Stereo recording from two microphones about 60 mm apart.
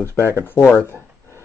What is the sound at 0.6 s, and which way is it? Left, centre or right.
Speech, left.